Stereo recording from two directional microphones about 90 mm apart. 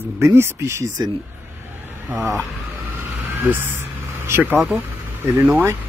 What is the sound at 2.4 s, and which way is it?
Vehicle, 25° right (ahead or behind).